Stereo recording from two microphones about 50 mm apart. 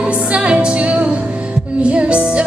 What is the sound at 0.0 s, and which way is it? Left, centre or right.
Music, right.